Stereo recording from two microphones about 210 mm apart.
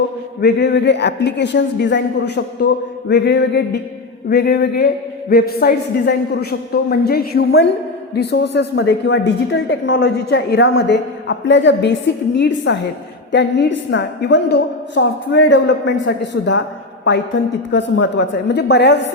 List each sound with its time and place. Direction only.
0.4 s a woman's voice: 55° left (ahead or behind)
17.7 s a woman's voice: 60° left (ahead or behind)